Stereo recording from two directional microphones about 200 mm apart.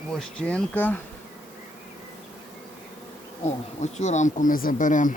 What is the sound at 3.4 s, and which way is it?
Speech, 35° left (ahead or behind).